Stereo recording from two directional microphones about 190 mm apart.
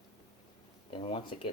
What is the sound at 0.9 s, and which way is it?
Speech, 30° left (ahead or behind).